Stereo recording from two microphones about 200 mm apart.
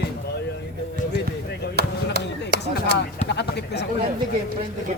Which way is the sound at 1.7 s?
55° right (ahead or behind).